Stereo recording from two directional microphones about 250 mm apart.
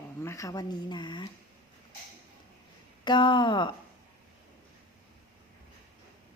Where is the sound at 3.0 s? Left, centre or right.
Centre.